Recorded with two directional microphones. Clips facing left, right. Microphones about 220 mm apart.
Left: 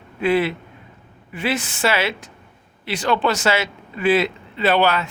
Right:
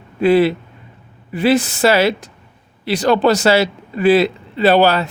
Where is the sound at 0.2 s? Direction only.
35° right (ahead or behind).